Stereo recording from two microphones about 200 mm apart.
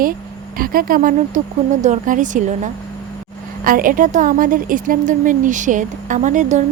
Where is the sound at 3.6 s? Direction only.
45° right (ahead or behind).